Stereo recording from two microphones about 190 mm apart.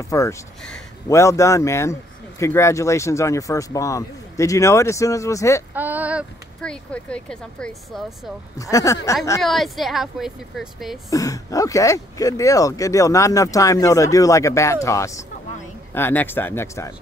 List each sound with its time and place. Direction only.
0.1 s speech: 15° left (ahead or behind)
5.8 s a sound: 10° right (ahead or behind)
6.6 s a woman's voice: 5° left (ahead or behind)
8.5 s speech: 15° left (ahead or behind)
9.4 s a woman's voice: centre (ahead or behind)
11.1 s speech: 20° left (ahead or behind)